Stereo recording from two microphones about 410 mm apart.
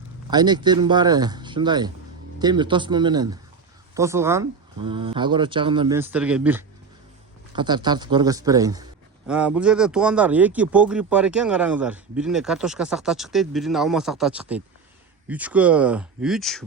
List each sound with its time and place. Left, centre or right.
0.3 s a man's voice: centre